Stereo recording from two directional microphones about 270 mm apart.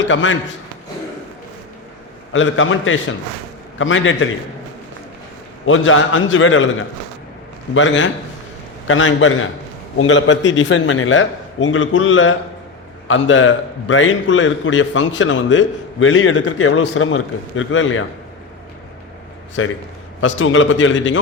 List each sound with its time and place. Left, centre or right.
0.0 s a man's voice: left
2.3 s a man's voice: left
5.6 s a man's voice: left
7.7 s a man's voice: left
19.6 s a man's voice: left